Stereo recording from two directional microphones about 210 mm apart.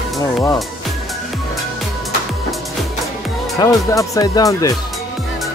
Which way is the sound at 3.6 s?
15° left (ahead or behind).